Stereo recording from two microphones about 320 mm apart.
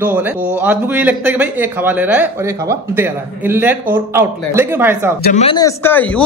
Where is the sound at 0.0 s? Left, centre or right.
Centre.